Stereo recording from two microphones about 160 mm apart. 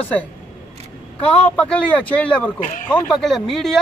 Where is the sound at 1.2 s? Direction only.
10° left (ahead or behind).